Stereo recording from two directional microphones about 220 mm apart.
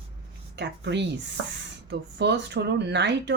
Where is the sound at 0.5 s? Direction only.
50° right (ahead or behind).